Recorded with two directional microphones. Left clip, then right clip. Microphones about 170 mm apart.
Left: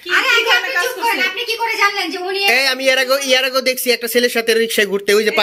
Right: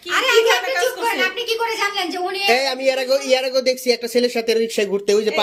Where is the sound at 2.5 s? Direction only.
Centre (ahead or behind).